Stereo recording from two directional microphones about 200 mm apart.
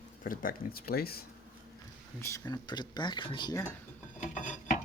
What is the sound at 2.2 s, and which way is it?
Speech, 15° left (ahead or behind).